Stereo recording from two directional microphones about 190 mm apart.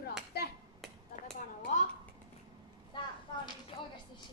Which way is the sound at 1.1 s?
45° left (ahead or behind).